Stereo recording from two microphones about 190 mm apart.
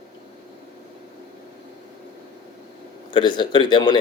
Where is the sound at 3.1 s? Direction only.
25° left (ahead or behind).